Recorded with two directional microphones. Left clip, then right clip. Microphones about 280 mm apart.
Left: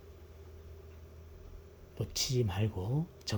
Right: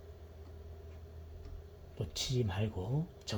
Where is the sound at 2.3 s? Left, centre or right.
Left.